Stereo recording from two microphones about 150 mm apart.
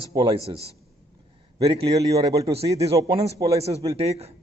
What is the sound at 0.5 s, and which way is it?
Speech, 40° right (ahead or behind).